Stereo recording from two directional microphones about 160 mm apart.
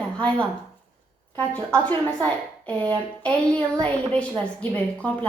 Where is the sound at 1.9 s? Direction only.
10° left (ahead or behind).